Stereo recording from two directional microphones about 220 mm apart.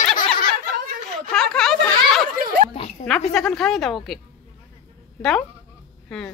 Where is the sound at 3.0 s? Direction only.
35° left (ahead or behind).